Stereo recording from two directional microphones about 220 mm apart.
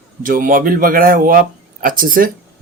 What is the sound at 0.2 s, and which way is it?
Speech, 40° right (ahead or behind).